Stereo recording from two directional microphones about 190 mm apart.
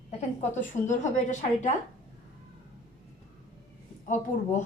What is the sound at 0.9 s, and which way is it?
Speech, 40° left (ahead or behind).